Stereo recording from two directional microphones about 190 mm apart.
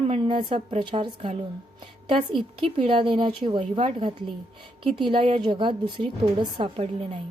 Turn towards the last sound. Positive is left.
turn(degrees=-30)  # may be behind; listen again after turning